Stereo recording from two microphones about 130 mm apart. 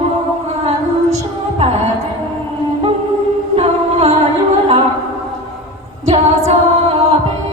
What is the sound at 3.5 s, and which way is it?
Music, 55° right (ahead or behind).